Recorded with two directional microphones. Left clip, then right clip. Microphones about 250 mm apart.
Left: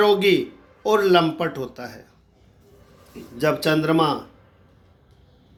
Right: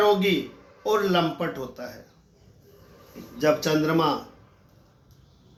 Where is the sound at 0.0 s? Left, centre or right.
Left.